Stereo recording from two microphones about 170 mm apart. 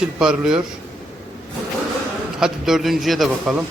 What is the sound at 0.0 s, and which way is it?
Speech, 5° right (ahead or behind).